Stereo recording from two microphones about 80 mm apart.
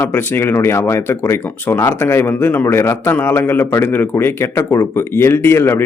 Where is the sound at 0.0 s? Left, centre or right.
Left.